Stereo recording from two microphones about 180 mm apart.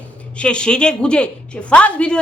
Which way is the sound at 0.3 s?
5° left (ahead or behind).